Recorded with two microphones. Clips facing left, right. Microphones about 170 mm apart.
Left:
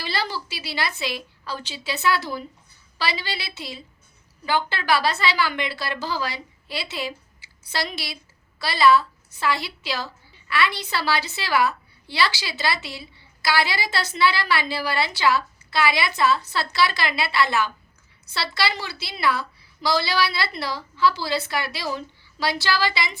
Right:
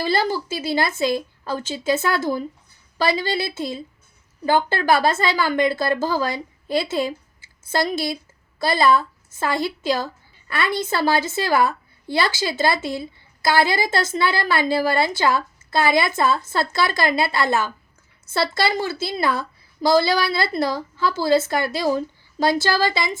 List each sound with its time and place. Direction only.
0.0 s a woman's voice: 45° right (ahead or behind)